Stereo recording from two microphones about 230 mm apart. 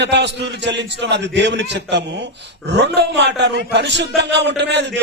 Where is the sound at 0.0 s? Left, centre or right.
Right.